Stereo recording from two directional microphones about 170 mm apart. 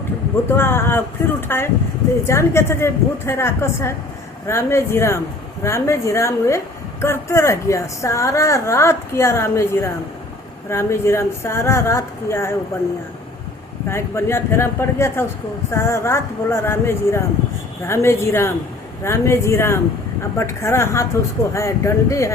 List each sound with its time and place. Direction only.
0.4 s a woman's voice: 15° left (ahead or behind)
13.9 s a woman's voice: 15° left (ahead or behind)